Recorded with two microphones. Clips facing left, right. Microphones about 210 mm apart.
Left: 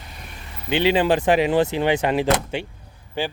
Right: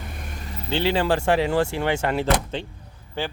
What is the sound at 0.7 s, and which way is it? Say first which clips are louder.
Speech: left 3 dB; 15° left (ahead or behind).